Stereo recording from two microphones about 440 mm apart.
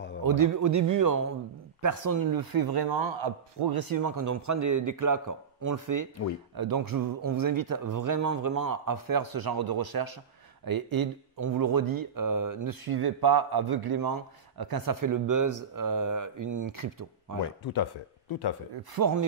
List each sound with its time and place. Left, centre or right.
0.2 s speech: right
6.5 s speech: right
18.3 s speech: left
18.9 s speech: right